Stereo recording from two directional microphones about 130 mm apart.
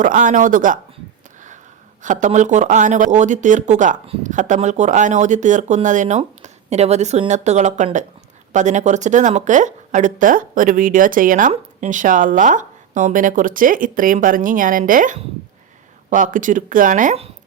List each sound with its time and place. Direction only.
0.0 s speech: 90° right
2.0 s speech: 75° right (ahead or behind); by 11.5 s 90° right
11.5 s speech: 70° right (ahead or behind)